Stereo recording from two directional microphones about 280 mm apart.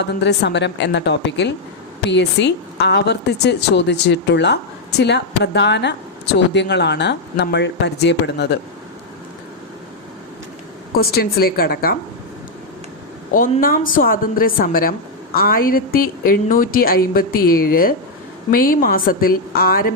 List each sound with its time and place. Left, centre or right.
0.0 s speech: left
10.9 s speech: left
13.3 s speech: left